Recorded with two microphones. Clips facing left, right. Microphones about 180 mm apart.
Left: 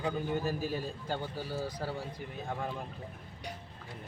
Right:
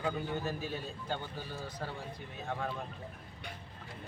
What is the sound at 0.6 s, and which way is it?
A man's voice, 40° left (ahead or behind).